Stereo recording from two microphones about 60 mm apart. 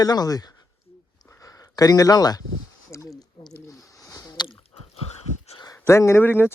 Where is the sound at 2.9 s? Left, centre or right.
Left.